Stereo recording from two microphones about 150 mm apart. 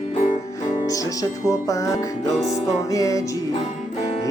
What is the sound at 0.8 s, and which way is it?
Music, 25° left (ahead or behind).